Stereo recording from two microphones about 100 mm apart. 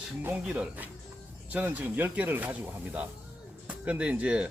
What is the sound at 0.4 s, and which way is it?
Speech, 10° right (ahead or behind).